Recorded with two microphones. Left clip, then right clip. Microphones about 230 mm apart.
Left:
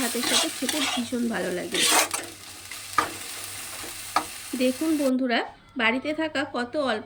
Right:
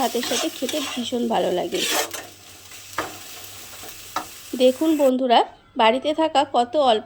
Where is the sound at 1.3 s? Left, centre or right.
Centre.